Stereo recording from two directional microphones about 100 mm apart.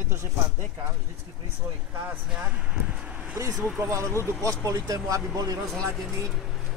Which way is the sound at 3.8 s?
30° right (ahead or behind).